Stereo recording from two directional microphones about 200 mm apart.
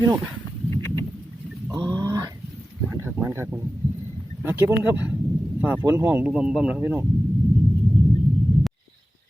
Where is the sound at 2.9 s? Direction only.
10° right (ahead or behind).